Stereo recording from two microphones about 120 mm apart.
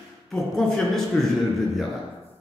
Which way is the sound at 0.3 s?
5° left (ahead or behind).